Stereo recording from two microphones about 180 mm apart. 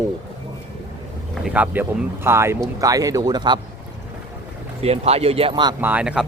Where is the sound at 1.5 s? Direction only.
10° right (ahead or behind).